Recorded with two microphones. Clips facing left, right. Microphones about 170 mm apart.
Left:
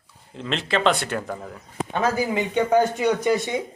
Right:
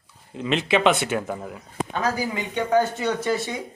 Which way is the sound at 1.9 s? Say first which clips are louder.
Left 4 dB; 20° left (ahead or behind).